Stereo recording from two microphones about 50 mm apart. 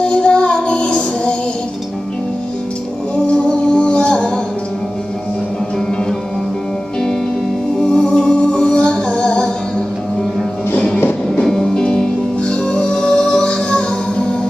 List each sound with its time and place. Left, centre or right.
0.0 s music: centre
3.3 s music: centre
7.8 s music: centre
11.4 s music: centre